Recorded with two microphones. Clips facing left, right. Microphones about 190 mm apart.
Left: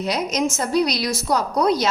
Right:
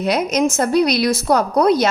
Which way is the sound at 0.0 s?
60° right (ahead or behind).